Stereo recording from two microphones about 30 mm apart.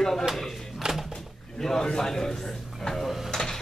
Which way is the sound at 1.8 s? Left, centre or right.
Left.